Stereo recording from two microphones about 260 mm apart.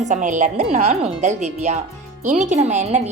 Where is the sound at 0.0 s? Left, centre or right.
Right.